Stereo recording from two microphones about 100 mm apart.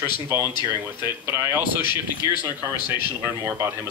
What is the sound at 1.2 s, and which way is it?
A man's voice, 25° right (ahead or behind).